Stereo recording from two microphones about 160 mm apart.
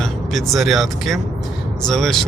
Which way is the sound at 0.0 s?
Centre (ahead or behind).